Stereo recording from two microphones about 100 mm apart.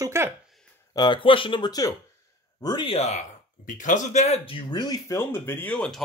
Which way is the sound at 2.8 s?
85° left.